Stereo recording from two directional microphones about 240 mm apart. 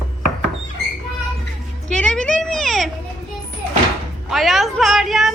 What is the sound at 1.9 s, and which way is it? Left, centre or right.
Speech, centre.